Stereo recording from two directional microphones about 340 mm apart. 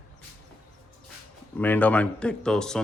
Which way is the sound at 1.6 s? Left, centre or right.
Centre.